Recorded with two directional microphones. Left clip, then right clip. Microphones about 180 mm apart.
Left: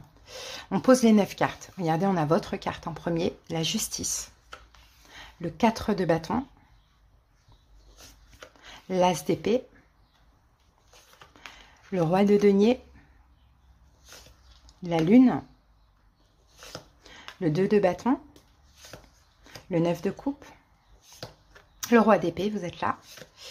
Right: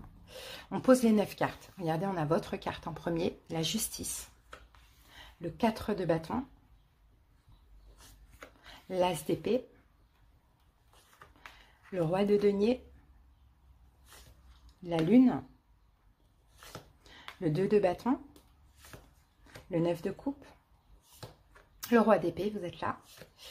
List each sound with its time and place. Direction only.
0.2 s speech: 20° left (ahead or behind)
5.1 s speech: 20° left (ahead or behind)
8.5 s speech: 15° left (ahead or behind)
11.9 s speech: 20° left (ahead or behind)
15.0 s speech: 15° left (ahead or behind)
16.5 s chopping: 10° left (ahead or behind)
17.4 s a sound: 15° left (ahead or behind)
19.7 s speech: 20° left (ahead or behind)
21.8 s speech: 15° left (ahead or behind)